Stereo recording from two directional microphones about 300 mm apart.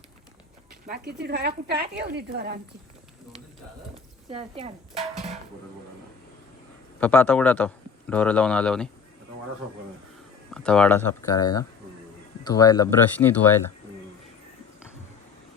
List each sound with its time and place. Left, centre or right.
0.9 s speech: right
3.9 s a sound: centre
7.0 s speech: centre
10.5 s speech: centre